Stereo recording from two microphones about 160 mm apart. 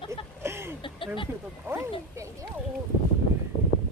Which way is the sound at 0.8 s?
30° left (ahead or behind).